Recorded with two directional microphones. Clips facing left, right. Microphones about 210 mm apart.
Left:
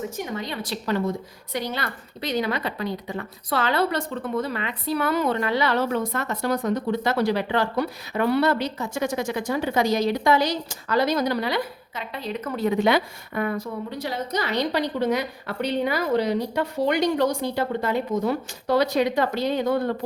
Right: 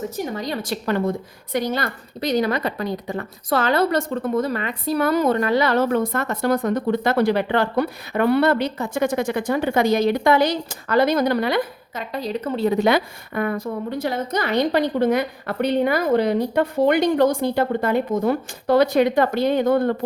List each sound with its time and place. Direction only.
0.3 s a woman's voice: 40° right (ahead or behind); by 1.1 s 55° right (ahead or behind)
1.5 s a woman's voice: 45° right (ahead or behind)